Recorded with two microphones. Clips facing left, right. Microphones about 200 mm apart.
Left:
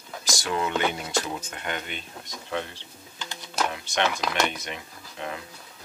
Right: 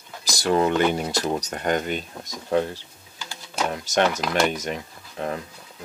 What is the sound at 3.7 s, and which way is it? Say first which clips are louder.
Speech: right 5 dB; 40° right (ahead or behind).